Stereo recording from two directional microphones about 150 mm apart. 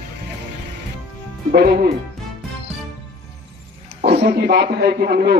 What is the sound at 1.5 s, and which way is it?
Speech, 90° right.